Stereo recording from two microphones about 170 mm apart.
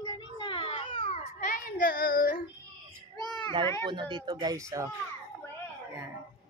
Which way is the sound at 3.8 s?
30° right (ahead or behind).